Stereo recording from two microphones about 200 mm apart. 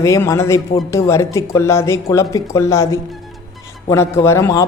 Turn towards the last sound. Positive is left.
turn(degrees=15)  # may be behind; listen again after turning